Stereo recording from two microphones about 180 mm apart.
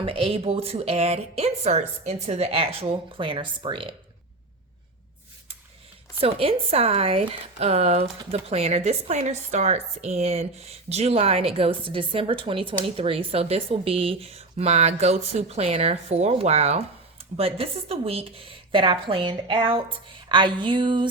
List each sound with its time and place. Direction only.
0.0 s a woman's voice: 30° right (ahead or behind)
6.1 s a woman's voice: 30° right (ahead or behind)
20.2 s a sound: 25° right (ahead or behind)